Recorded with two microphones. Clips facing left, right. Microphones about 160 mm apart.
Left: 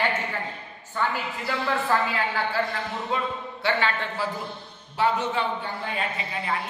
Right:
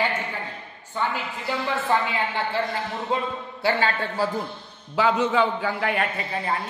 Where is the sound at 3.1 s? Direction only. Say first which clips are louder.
Right 3 dB; 30° right (ahead or behind).